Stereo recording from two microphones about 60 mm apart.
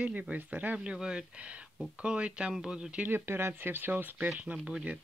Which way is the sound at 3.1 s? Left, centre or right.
Right.